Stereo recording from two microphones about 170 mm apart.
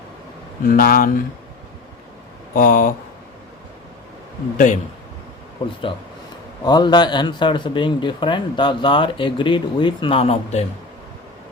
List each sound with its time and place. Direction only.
0.6 s speech: 60° left (ahead or behind)
2.6 s speech: 55° left (ahead or behind)
4.5 s speech: 50° left (ahead or behind)
5.6 s a man's voice: 25° left (ahead or behind)